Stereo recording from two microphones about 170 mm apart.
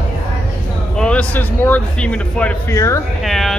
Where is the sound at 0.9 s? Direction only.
5° left (ahead or behind).